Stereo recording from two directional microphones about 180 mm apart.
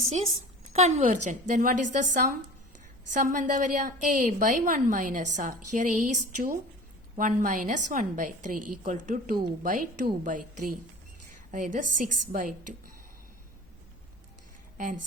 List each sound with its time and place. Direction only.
0.7 s a woman's voice: 40° right (ahead or behind)